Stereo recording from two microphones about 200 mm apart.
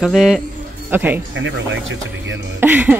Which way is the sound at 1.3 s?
70° right (ahead or behind).